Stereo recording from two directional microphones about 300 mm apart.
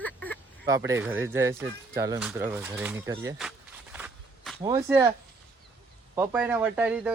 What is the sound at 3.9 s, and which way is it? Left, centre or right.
Walk, centre.